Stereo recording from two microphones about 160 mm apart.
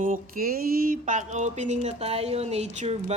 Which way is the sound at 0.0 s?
60° right (ahead or behind).